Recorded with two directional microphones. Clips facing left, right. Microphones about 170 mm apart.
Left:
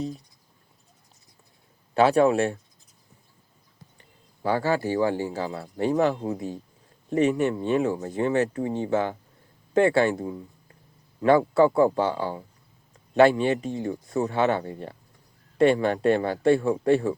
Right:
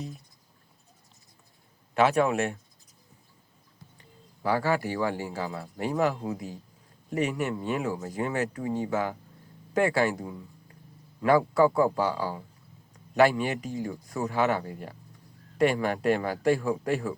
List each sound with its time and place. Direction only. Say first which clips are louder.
2.0 s speech: left 4 dB; 30° left (ahead or behind)
4.4 s speech: left 2 dB; 25° left (ahead or behind)